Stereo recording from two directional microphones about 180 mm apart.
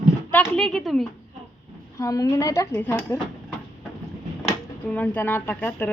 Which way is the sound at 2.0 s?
20° left (ahead or behind).